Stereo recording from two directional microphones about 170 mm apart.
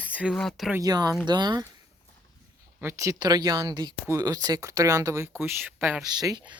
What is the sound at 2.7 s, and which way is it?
Speech, 15° right (ahead or behind).